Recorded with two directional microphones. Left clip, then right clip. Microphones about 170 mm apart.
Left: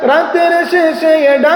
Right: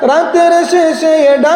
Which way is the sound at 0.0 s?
40° right (ahead or behind).